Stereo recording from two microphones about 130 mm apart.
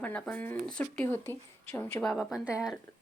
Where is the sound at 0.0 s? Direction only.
10° left (ahead or behind).